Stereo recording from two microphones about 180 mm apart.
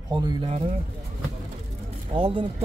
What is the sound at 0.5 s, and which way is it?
Speech, 35° right (ahead or behind).